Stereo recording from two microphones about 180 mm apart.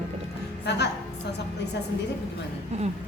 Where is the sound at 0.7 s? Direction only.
70° left (ahead or behind).